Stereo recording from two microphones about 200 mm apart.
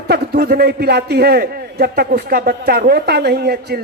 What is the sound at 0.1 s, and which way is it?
A man's voice, 50° right (ahead or behind).